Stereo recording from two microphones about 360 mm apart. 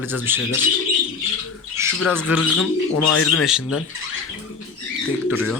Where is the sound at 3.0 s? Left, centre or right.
Left.